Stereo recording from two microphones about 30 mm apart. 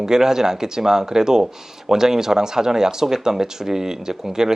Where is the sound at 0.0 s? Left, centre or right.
Centre.